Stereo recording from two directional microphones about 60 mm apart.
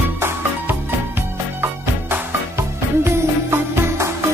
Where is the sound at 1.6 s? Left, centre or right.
Right.